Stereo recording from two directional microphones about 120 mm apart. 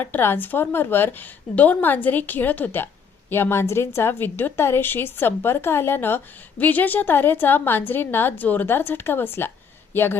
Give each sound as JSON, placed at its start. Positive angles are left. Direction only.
{"t": 0.0, "sound": "a woman's voice", "side_deg": 15}